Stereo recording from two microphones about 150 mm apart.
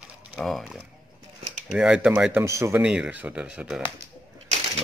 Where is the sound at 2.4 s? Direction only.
20° right (ahead or behind).